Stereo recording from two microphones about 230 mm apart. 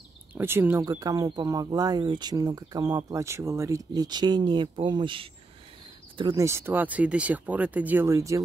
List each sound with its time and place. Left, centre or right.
0.3 s speech: centre